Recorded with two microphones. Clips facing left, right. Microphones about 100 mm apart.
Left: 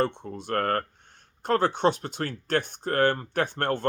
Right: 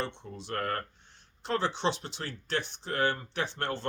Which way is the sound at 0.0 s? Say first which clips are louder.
Left 9 dB; 50° left (ahead or behind).